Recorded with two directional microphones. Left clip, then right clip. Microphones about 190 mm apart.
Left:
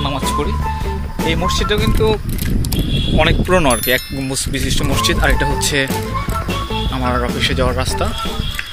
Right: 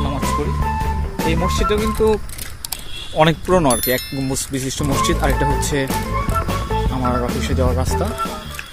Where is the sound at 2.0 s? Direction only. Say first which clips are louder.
Even; 20° right (ahead or behind).